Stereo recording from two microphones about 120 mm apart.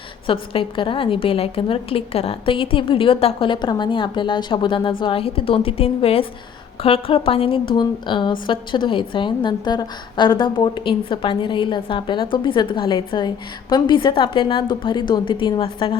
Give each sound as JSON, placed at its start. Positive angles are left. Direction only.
{"t": 0.3, "sound": "a woman's voice", "side_deg": 45}